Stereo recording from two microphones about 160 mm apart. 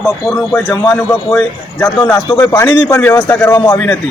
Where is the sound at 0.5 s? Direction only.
Centre (ahead or behind).